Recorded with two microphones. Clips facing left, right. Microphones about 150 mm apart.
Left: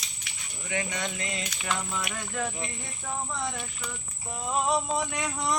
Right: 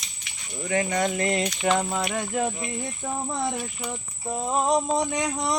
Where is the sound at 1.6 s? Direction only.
55° right (ahead or behind).